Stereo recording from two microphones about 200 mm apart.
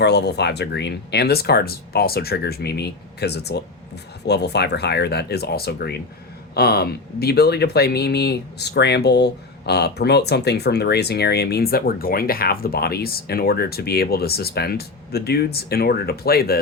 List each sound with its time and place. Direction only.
0.0 s speech: 55° left (ahead or behind)